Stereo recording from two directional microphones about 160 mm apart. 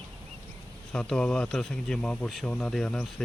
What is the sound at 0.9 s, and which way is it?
Speech, 5° left (ahead or behind).